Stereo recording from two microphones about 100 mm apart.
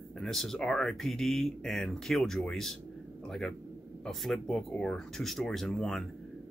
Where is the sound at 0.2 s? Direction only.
Centre (ahead or behind).